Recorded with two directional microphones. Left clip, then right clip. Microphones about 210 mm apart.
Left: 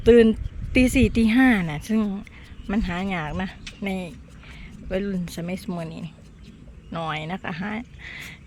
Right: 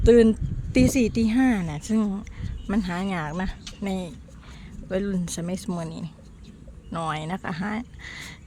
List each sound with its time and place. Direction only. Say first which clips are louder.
0.0 s speech: left 2 dB; centre (ahead or behind)